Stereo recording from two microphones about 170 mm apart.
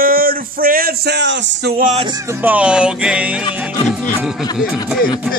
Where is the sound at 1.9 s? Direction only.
25° right (ahead or behind).